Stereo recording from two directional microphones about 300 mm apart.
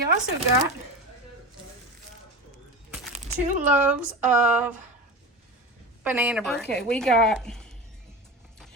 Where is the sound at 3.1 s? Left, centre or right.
Right.